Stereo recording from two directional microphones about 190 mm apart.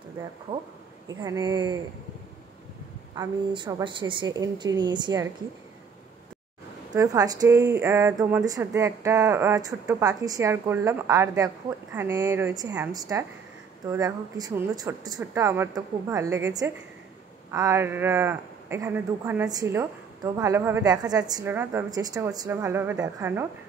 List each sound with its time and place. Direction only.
1.0 s a woman's voice: 20° right (ahead or behind)
3.2 s a woman's voice: 25° right (ahead or behind)
6.9 s a woman's voice: 20° right (ahead or behind)